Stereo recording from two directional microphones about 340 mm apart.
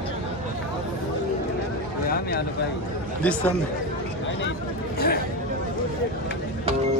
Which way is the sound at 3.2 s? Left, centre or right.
Centre.